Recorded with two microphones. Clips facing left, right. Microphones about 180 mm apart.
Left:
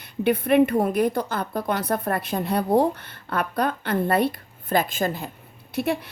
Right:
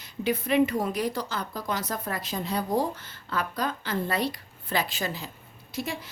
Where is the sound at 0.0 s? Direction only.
60° left (ahead or behind).